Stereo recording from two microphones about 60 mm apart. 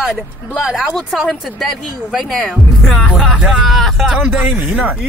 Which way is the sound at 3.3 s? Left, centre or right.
Centre.